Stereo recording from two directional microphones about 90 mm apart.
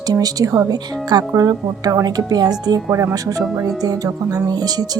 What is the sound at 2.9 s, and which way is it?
Speech, 35° right (ahead or behind).